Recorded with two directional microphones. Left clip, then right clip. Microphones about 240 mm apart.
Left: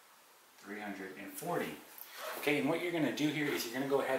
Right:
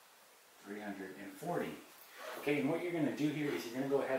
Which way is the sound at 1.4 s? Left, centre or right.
Right.